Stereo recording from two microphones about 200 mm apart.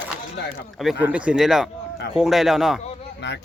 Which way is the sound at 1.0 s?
5° right (ahead or behind).